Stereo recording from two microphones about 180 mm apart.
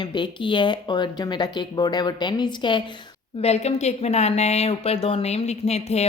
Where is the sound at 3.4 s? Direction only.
35° left (ahead or behind).